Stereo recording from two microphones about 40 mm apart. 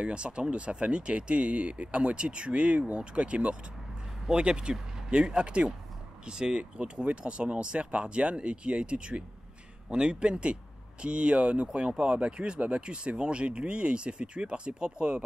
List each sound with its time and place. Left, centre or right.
0.0 s speech: right